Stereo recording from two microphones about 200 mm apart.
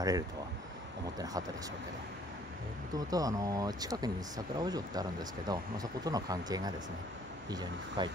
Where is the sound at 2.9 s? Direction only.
20° right (ahead or behind).